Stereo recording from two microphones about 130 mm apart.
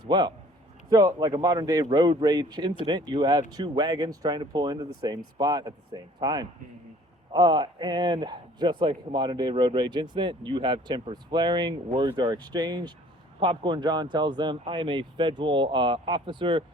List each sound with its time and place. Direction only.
0.1 s a man's voice: 35° right (ahead or behind)